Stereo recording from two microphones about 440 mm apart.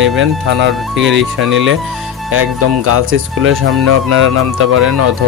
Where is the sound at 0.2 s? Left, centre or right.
Right.